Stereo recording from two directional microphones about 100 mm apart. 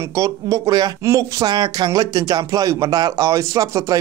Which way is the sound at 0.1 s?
35° right (ahead or behind).